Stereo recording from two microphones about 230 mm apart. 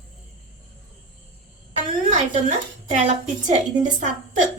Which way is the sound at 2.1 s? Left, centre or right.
Right.